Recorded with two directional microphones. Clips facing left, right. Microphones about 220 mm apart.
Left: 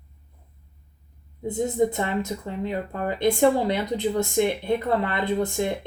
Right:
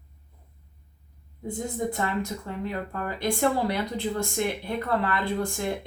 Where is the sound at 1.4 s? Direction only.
20° left (ahead or behind).